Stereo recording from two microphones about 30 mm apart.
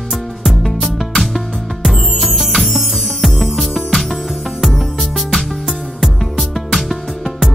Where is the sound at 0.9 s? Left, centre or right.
Centre.